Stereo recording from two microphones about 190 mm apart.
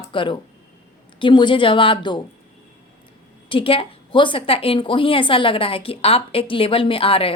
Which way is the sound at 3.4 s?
25° left (ahead or behind).